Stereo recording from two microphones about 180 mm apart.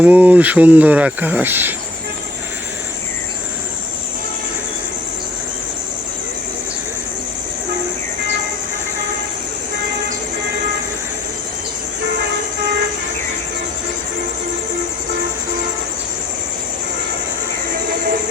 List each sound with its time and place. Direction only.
0.0 s speech: 10° right (ahead or behind)